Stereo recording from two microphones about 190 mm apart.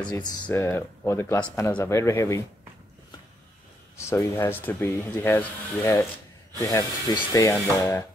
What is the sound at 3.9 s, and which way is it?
Speech, 15° left (ahead or behind).